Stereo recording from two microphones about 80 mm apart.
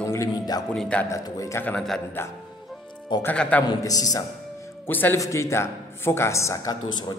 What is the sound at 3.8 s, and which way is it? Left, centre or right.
Speech, left.